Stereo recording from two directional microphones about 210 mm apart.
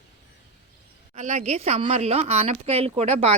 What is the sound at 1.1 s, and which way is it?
Speech, 35° right (ahead or behind).